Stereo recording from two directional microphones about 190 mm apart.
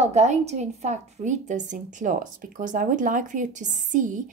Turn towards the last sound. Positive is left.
turn(degrees=-40)  # may be behind; listen again after turning